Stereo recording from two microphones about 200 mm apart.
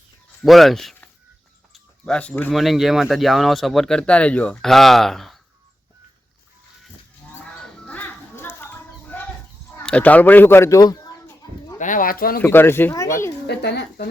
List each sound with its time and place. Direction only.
0.4 s speech: centre (ahead or behind)
7.6 s a sound: 5° left (ahead or behind)
9.7 s speech: 5° left (ahead or behind)
11.8 s speech: 40° left (ahead or behind)
12.4 s speech: 10° left (ahead or behind)
13.5 s speech: 55° left (ahead or behind)